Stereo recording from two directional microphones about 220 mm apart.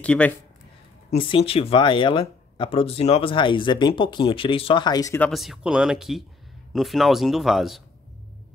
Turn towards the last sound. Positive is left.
turn(degrees=0)  # may be behind; listen again after turning